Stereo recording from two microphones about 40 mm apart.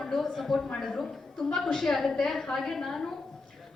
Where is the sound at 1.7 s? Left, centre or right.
Centre.